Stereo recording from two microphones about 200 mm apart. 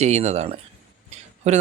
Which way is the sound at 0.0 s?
35° right (ahead or behind).